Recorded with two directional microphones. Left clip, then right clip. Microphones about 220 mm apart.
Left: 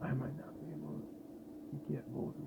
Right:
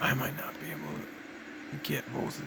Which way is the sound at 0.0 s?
40° right (ahead or behind).